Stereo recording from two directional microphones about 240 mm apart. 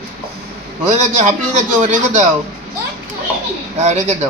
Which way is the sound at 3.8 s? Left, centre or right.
Right.